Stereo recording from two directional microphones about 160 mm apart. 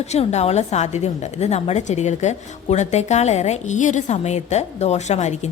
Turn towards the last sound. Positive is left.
turn(degrees=45)  # may be behind; listen again after turning